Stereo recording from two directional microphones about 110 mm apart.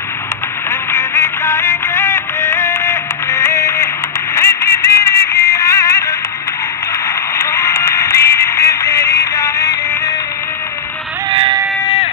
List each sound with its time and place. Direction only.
0.9 s music: 25° left (ahead or behind)
7.3 s music: 25° left (ahead or behind)